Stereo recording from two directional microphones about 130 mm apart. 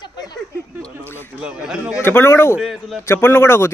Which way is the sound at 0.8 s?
15° left (ahead or behind).